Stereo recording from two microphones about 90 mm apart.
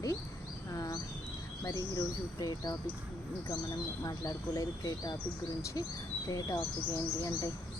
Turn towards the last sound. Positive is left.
turn(degrees=50)  # may be behind; listen again after turning